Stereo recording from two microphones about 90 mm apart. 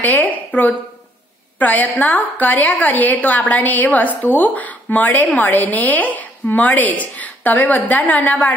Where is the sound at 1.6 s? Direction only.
20° left (ahead or behind).